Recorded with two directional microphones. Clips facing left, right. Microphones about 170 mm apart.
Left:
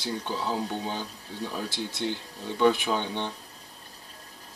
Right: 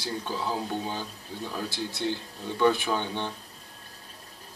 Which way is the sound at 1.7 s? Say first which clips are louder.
Right 1 dB; 20° left (ahead or behind).